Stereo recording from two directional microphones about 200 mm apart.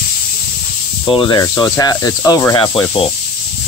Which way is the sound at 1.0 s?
25° left (ahead or behind).